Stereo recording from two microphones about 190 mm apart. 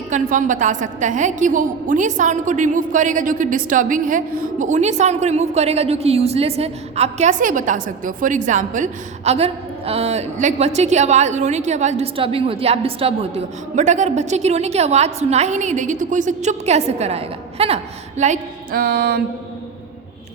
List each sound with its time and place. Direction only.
0.1 s a woman's voice: 40° right (ahead or behind)
18.2 s music: 45° right (ahead or behind)